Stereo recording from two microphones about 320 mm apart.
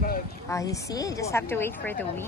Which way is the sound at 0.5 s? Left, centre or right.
Centre.